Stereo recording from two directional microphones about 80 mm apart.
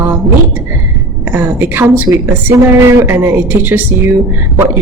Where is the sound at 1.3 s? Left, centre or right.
Right.